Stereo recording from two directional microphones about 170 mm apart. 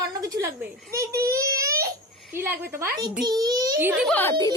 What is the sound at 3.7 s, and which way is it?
Speech, 10° right (ahead or behind).